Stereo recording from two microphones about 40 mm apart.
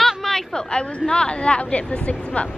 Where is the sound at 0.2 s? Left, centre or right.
Centre.